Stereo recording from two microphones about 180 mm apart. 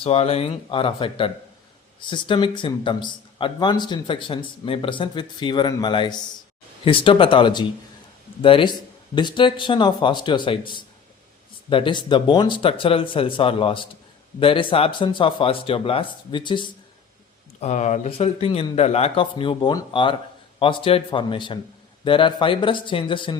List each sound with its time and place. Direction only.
0.0 s a man's voice: 35° left (ahead or behind)
17.6 s a man's voice: 40° left (ahead or behind)